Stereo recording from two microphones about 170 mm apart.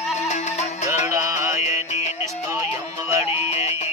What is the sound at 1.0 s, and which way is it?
Music, 15° right (ahead or behind).